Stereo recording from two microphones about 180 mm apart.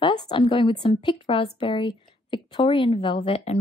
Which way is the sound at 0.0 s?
25° left (ahead or behind).